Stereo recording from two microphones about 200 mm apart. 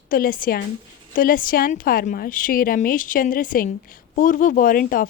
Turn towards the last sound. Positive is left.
turn(degrees=45)  # may be behind; listen again after turning